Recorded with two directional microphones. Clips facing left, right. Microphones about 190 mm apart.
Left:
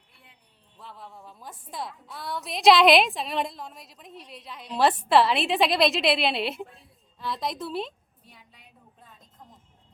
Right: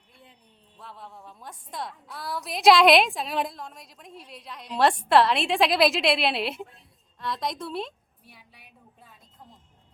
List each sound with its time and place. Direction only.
0.8 s a woman's voice: centre (ahead or behind)